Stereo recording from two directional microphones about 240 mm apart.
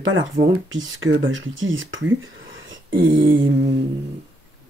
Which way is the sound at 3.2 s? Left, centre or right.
Right.